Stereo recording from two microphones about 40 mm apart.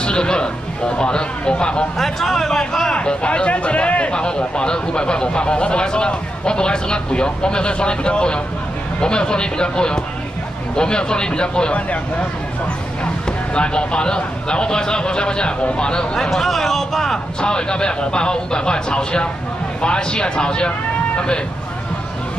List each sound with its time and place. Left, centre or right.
0.0 s speech: left
2.0 s speech: centre
2.9 s speech: left
13.6 s speech: left
16.2 s speech: centre
17.4 s speech: left